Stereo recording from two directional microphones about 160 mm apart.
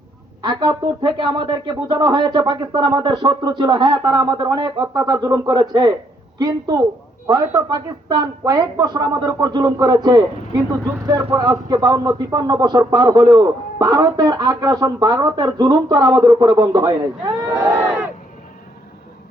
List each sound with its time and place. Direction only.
0.4 s speech: 25° right (ahead or behind)